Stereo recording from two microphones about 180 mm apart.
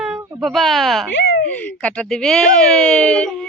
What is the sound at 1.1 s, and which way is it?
Speech, 90° left.